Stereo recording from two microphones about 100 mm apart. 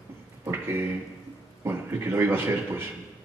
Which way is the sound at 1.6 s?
25° right (ahead or behind).